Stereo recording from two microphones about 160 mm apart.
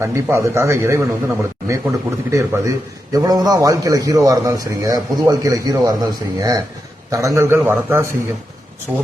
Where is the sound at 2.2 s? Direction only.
15° right (ahead or behind).